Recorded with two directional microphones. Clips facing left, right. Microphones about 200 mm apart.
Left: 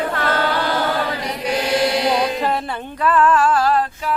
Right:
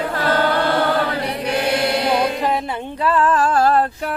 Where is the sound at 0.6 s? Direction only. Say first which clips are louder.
Right 3 dB; 55° right (ahead or behind).